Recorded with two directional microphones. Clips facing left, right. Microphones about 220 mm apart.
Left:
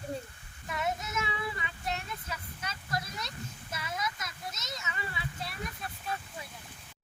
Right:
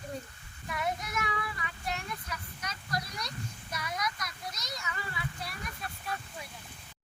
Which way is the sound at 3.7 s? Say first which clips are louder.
Right 1 dB; 25° left (ahead or behind).